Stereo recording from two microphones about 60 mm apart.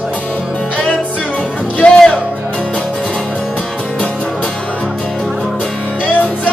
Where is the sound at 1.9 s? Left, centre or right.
Centre.